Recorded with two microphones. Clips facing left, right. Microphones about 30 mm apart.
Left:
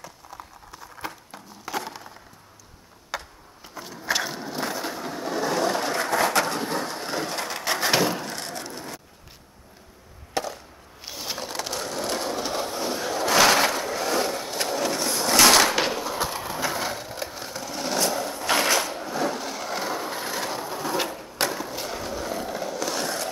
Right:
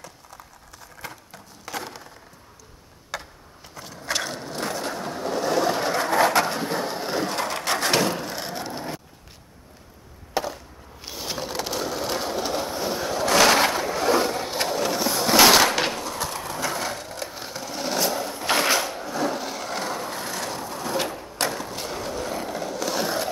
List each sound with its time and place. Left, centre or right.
0.7 s a sound: centre
3.1 s tick-tock: centre
3.7 s skateboard: centre; by 9.0 s right
10.3 s chop: centre
11.1 s crushing: centre
14.7 s a sound: centre
17.4 s sewing machine: centre